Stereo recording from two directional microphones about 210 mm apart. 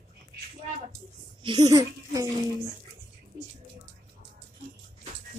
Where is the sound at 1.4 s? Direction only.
20° right (ahead or behind).